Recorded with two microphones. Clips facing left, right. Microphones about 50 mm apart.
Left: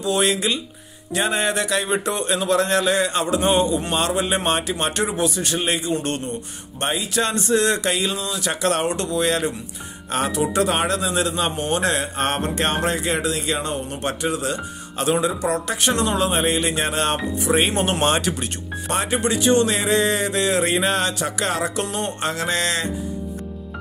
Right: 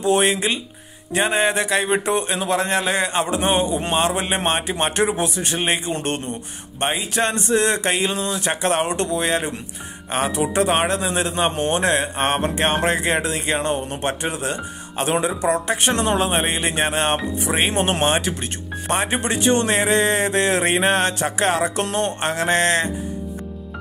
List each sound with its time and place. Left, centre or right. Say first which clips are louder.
0.0 s a man's voice: right 2 dB; right
17.5 s speech: left 2 dB; centre
17.7 s speech: right 1 dB; right